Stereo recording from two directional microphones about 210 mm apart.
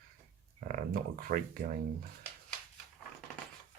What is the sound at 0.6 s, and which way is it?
Speech, 45° right (ahead or behind).